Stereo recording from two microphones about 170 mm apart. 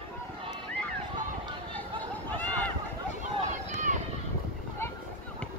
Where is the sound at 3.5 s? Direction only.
45° right (ahead or behind).